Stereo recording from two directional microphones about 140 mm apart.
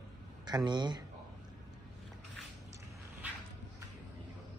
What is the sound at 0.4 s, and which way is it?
Speech, 30° right (ahead or behind).